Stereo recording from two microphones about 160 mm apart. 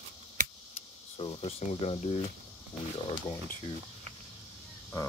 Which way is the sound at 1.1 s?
35° left (ahead or behind).